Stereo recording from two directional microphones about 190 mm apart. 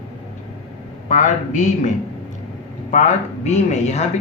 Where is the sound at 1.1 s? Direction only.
40° left (ahead or behind).